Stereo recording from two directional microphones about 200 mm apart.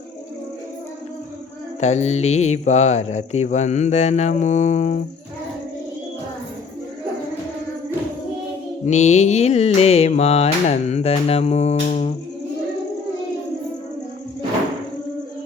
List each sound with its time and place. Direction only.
1.8 s music: 35° left (ahead or behind)
8.9 s music: 35° left (ahead or behind)